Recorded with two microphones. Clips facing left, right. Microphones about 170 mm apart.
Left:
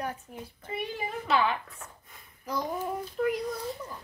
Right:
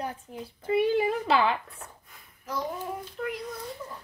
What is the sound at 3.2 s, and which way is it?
Speech, 5° left (ahead or behind).